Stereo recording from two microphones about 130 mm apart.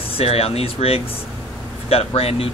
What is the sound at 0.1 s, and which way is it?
Speech, 50° left (ahead or behind).